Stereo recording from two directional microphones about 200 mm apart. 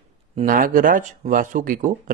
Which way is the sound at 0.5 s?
45° right (ahead or behind).